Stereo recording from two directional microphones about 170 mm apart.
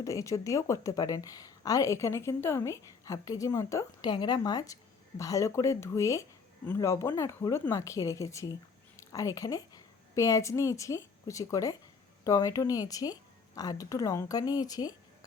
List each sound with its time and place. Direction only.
0.0 s a woman's voice: 20° left (ahead or behind)